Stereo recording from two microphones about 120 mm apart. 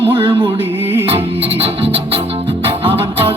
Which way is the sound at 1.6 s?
55° right (ahead or behind).